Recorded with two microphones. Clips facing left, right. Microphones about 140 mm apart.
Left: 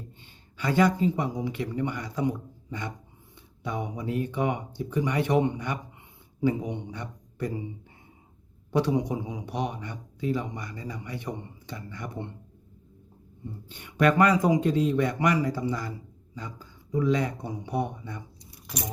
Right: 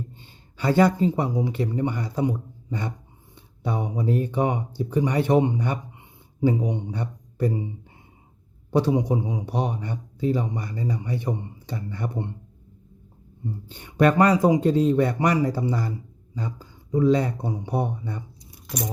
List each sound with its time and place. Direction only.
0.5 s a man's voice: 35° right (ahead or behind)
8.7 s a man's voice: 25° right (ahead or behind)
13.7 s a man's voice: 35° right (ahead or behind)